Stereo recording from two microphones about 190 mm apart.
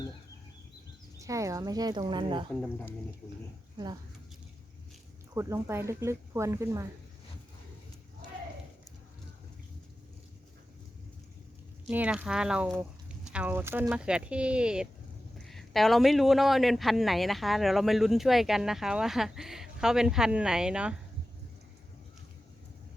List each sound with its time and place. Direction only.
1.2 s speech: 15° right (ahead or behind)
5.3 s speech: 15° right (ahead or behind)
11.9 s a man's voice: 5° right (ahead or behind)